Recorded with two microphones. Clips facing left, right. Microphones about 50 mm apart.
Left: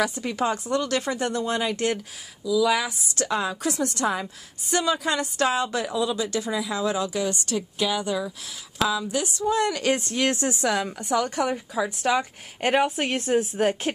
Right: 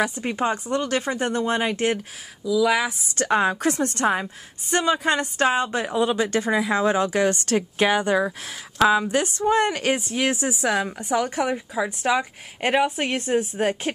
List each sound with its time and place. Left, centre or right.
0.0 s speech: right
3.2 s a woman's voice: right
9.9 s a woman's voice: centre